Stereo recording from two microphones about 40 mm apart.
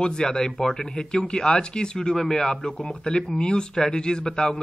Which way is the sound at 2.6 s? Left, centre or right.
Left.